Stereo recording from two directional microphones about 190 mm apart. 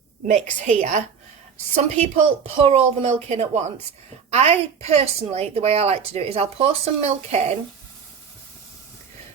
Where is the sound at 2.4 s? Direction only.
30° right (ahead or behind).